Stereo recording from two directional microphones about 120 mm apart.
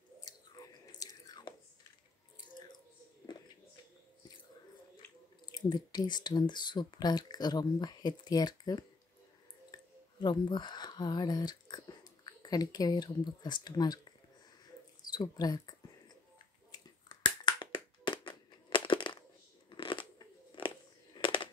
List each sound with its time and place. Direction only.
0.2 s chewing: 30° left (ahead or behind)
5.5 s speech: 35° left (ahead or behind)
10.2 s speech: 40° left (ahead or behind)
15.1 s speech: 35° left (ahead or behind)
16.7 s a sound: 40° left (ahead or behind)
19.7 s shuffling cards: 45° left (ahead or behind)
20.2 s a sound: 40° left (ahead or behind)